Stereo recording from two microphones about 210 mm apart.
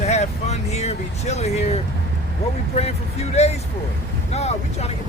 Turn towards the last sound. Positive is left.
turn(degrees=30)  # may be behind; listen again after turning